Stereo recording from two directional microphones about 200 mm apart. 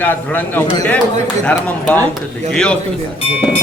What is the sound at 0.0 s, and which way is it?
Speech, 10° left (ahead or behind).